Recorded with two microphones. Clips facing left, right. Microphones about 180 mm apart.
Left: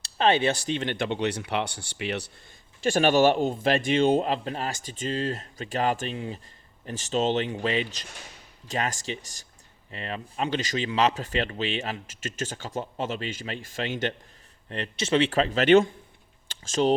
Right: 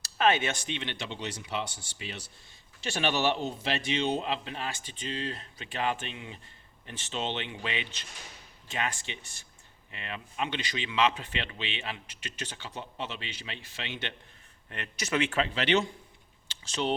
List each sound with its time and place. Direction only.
0.0 s speech: 30° left (ahead or behind); by 2.3 s 70° left (ahead or behind)
2.8 s a man's voice: 45° left (ahead or behind)
14.7 s speech: 30° left (ahead or behind); by 15.9 s 50° left (ahead or behind)
16.5 s a sound: 45° left (ahead or behind)